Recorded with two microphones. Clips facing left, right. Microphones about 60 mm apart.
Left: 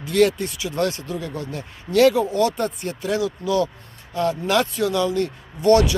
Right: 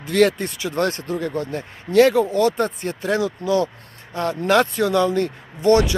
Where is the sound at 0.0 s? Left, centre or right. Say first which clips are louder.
Right 1 dB; right.